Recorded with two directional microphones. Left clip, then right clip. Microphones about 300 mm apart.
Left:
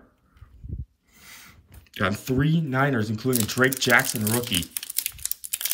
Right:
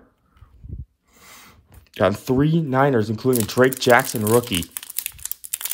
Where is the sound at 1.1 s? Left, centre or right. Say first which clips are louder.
Right 1 dB; centre.